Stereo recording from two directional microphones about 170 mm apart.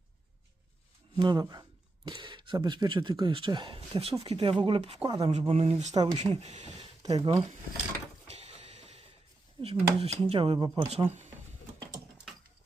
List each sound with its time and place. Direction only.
1.1 s speech: 25° right (ahead or behind)
5.3 s speech: 35° right (ahead or behind)
5.9 s speech: 25° right (ahead or behind)
6.2 s speech: 40° right (ahead or behind)
7.0 s speech: 20° right (ahead or behind)
8.3 s a sound: 35° right (ahead or behind)
9.6 s speech: 25° right (ahead or behind)